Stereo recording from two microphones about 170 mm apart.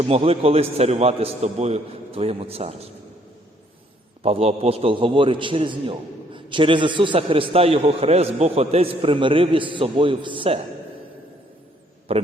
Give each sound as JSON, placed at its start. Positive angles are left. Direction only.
{"t": 0.0, "sound": "a man's voice", "side_deg": -35}
{"t": 4.2, "sound": "a man's voice", "side_deg": -35}
{"t": 12.1, "sound": "a man's voice", "side_deg": -35}